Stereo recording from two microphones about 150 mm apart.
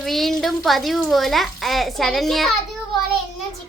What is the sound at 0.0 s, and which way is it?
A child's voice, centre (ahead or behind).